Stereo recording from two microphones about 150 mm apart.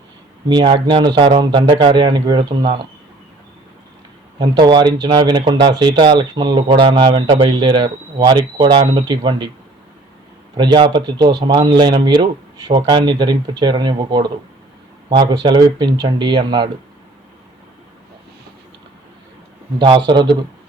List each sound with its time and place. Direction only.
0.4 s speech: 30° right (ahead or behind)
4.4 s speech: 30° right (ahead or behind)
10.6 s speech: 30° right (ahead or behind)
19.8 s speech: 35° right (ahead or behind)